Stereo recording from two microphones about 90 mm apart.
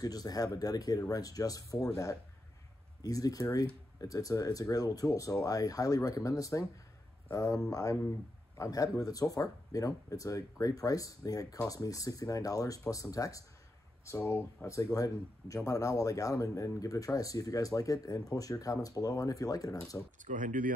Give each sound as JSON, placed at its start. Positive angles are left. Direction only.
{"t": 0.0, "sound": "speech", "side_deg": 45}
{"t": 3.0, "sound": "speech", "side_deg": 40}